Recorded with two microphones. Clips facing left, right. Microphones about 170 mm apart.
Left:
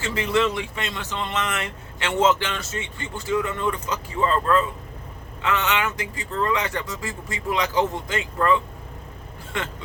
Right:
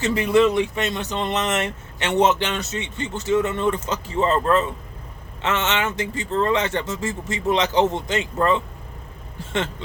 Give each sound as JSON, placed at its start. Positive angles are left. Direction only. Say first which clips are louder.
{"t": 0.0, "sound": "speech", "louder": "right 5 dB", "side_deg": -20}